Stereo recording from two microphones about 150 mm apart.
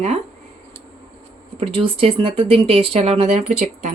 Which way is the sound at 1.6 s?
40° right (ahead or behind).